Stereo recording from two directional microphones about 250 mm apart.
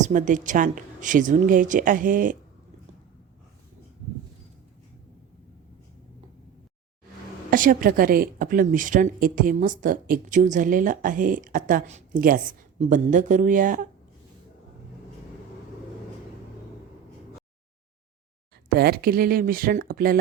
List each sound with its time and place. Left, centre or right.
0.0 s speech: right
7.5 s speech: right
18.7 s speech: right